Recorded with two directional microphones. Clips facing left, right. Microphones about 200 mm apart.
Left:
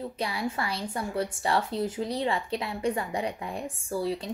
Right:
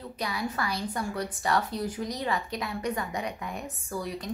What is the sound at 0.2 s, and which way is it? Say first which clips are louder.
A woman's voice: even; 25° left (ahead or behind).